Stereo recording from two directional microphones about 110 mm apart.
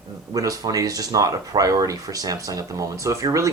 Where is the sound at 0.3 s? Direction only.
35° right (ahead or behind).